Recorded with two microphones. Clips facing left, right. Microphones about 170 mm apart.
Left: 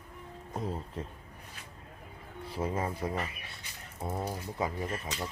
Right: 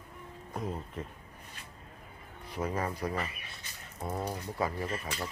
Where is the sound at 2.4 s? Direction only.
30° left (ahead or behind).